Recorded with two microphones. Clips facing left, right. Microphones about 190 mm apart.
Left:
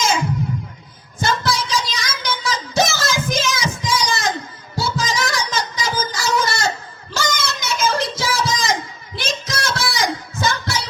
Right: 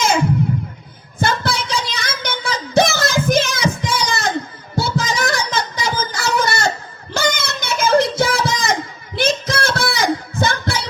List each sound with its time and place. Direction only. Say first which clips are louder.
0.0 s music: right 3 dB; 60° right (ahead or behind)
1.2 s a sound: right 1 dB; 60° right (ahead or behind)
10.3 s child singing: right 2 dB; 55° right (ahead or behind)